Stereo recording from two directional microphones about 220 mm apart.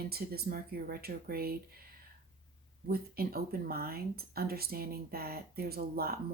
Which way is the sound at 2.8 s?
45° right (ahead or behind).